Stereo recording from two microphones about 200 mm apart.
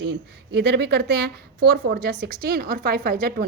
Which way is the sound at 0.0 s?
60° right (ahead or behind).